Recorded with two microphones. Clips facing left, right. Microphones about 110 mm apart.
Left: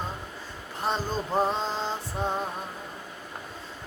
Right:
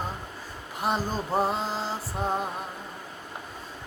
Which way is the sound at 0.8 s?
10° right (ahead or behind).